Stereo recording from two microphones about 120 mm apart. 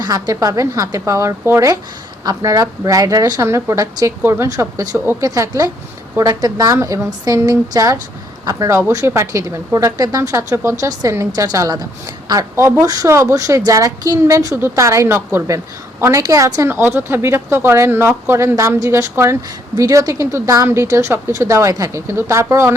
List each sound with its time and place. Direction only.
0.0 s a woman's voice: 30° right (ahead or behind)